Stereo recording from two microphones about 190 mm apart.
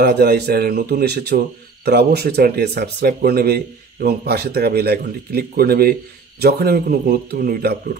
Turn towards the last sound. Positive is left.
turn(degrees=-55)  # may be behind; listen again after turning